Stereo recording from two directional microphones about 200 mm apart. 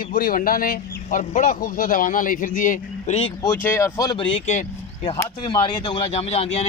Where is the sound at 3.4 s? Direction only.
10° left (ahead or behind).